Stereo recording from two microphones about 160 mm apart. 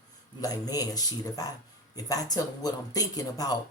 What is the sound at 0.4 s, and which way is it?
Speech, 25° left (ahead or behind).